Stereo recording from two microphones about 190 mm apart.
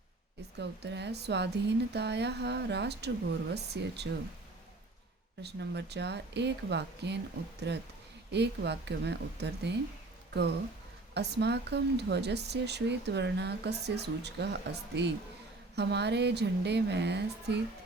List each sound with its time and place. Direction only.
0.6 s speech: 60° right (ahead or behind)
5.4 s speech: 60° right (ahead or behind)
11.1 s speech: 60° right (ahead or behind)